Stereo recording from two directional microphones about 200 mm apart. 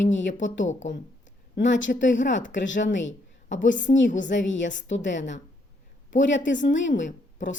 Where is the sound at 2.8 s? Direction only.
65° left (ahead or behind).